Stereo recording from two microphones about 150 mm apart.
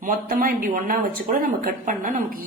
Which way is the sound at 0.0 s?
65° right (ahead or behind).